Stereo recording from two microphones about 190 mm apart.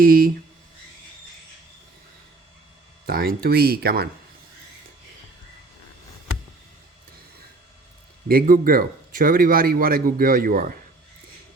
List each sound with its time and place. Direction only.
0.0 s a man's voice: 50° right (ahead or behind)
3.1 s a man's voice: 55° right (ahead or behind)
8.3 s a man's voice: 50° right (ahead or behind)